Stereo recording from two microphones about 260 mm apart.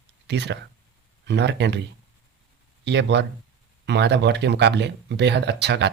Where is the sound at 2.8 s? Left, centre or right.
Right.